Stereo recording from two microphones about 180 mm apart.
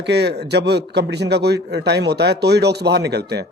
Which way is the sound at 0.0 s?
70° right (ahead or behind).